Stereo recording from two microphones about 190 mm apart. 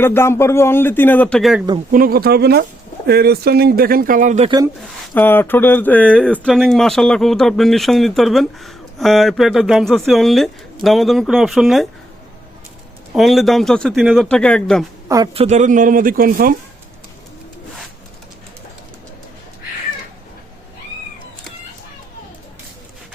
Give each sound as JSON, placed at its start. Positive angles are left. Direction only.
{"t": 0.0, "sound": "speech", "side_deg": 15}
{"t": 1.9, "sound": "speech", "side_deg": -50}
{"t": 4.4, "sound": "speech", "side_deg": -20}
{"t": 5.1, "sound": "speech", "side_deg": 10}
{"t": 13.1, "sound": "speech", "side_deg": 0}
{"t": 15.1, "sound": "speech", "side_deg": -25}